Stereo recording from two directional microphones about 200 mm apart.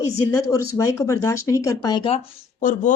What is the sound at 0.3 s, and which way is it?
A woman's voice, 15° left (ahead or behind).